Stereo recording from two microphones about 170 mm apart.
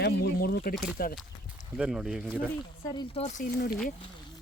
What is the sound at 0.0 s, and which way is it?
Speech, 65° left (ahead or behind).